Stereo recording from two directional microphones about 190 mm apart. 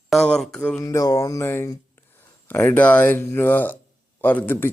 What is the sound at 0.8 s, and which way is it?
Speech, 15° left (ahead or behind).